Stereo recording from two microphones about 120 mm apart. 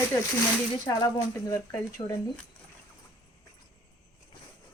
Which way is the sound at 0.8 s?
30° left (ahead or behind).